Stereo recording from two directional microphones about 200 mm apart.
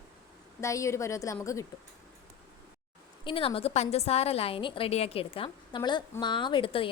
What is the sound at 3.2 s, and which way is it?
A woman's voice, 25° left (ahead or behind).